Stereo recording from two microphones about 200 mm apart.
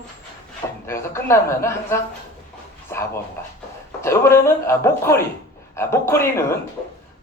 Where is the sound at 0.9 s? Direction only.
15° left (ahead or behind).